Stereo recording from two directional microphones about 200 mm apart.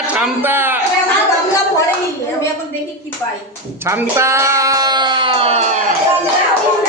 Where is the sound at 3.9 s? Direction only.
15° right (ahead or behind); by 5.7 s 35° right (ahead or behind).